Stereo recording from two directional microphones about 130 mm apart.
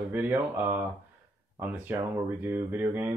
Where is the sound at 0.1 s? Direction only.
15° right (ahead or behind).